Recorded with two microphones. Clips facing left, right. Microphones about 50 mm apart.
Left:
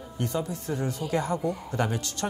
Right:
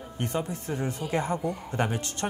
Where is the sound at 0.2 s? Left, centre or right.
Right.